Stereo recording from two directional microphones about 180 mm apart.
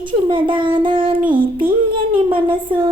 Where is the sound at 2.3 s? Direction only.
30° right (ahead or behind).